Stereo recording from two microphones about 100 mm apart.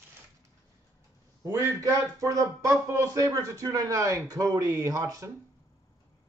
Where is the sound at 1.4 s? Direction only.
35° right (ahead or behind).